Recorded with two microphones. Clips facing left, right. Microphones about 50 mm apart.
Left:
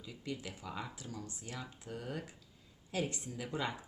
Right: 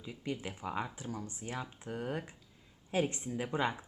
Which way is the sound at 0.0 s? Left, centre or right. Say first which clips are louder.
Right 4 dB; right.